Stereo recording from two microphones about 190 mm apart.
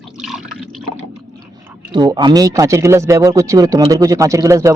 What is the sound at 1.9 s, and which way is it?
A man's voice, 20° right (ahead or behind).